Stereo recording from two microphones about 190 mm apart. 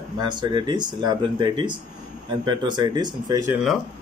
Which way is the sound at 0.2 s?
25° right (ahead or behind).